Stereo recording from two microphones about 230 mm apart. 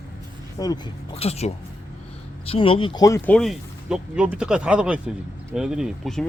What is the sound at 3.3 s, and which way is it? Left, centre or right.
Speech, centre.